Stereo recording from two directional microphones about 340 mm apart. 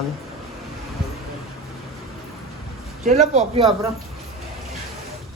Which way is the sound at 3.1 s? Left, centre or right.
Centre.